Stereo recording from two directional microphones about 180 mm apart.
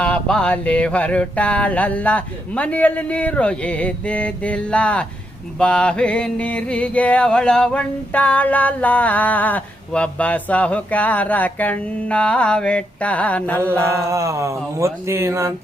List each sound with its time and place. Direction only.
0.0 s mantra: 5° left (ahead or behind)
13.6 s speech: 15° right (ahead or behind)